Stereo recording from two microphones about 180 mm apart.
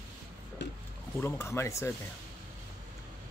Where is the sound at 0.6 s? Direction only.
80° left.